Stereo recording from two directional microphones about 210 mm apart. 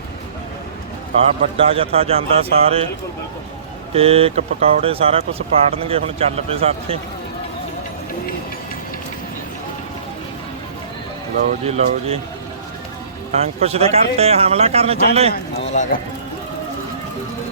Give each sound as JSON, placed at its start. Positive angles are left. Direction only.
{"t": 1.5, "sound": "speech", "side_deg": -25}
{"t": 3.9, "sound": "speech", "side_deg": -30}
{"t": 11.6, "sound": "speech", "side_deg": -30}
{"t": 13.4, "sound": "speech", "side_deg": -30}
{"t": 15.7, "sound": "speech", "side_deg": 35}